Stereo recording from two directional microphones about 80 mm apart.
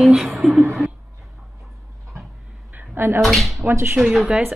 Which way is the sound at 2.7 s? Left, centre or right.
Right.